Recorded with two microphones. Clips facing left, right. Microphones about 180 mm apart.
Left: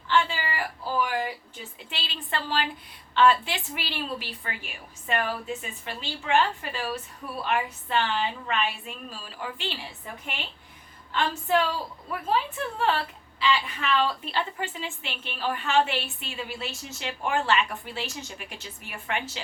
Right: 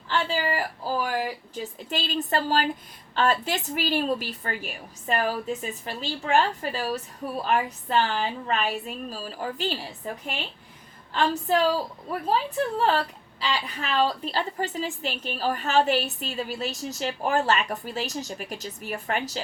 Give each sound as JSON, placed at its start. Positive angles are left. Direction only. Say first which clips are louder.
{"t": 0.1, "sound": "a woman's voice", "louder": "even", "side_deg": -40}